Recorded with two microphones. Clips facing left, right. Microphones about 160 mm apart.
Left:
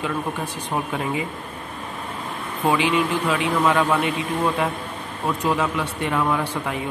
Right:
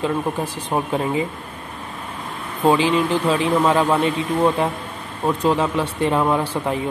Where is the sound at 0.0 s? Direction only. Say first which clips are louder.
Right 4 dB; 30° right (ahead or behind).